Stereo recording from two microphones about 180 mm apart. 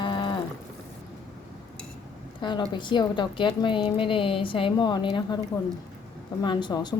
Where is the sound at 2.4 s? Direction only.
25° left (ahead or behind).